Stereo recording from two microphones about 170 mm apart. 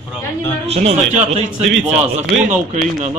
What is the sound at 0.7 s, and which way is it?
A man's voice, 40° right (ahead or behind).